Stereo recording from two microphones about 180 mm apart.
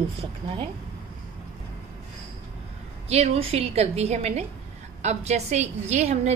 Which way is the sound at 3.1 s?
35° right (ahead or behind).